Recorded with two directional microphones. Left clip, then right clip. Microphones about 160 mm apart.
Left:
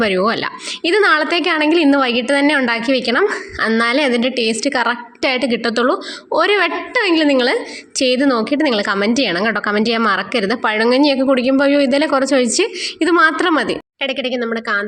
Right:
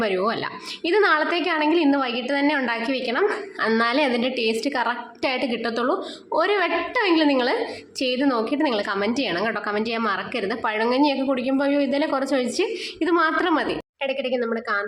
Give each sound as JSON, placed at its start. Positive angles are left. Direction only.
{"t": 0.0, "sound": "a woman's voice", "side_deg": 35}
{"t": 3.7, "sound": "a woman's voice", "side_deg": 30}